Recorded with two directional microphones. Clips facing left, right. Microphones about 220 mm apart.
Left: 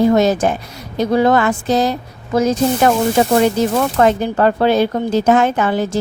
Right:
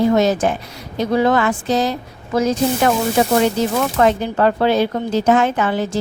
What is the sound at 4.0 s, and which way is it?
Speech, 45° left (ahead or behind).